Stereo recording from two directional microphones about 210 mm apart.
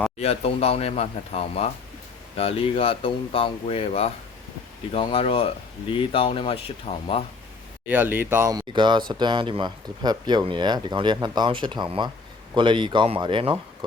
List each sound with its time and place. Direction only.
0.2 s speech: 30° left (ahead or behind)
7.9 s speech: 10° right (ahead or behind)